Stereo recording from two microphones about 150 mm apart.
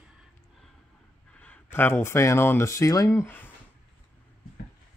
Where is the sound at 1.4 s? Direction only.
10° left (ahead or behind).